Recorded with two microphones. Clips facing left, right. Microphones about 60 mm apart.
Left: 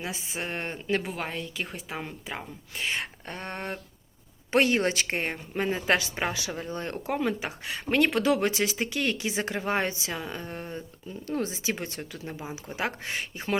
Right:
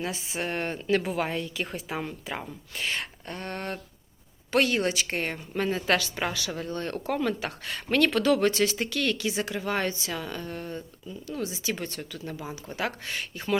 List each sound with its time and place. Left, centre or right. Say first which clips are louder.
0.0 s a woman's voice: right 3 dB; centre
2.9 s a woman's voice: even; left
11.1 s a woman's voice: left 3 dB; left